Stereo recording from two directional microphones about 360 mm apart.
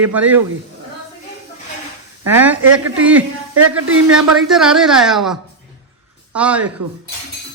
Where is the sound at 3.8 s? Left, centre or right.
Right.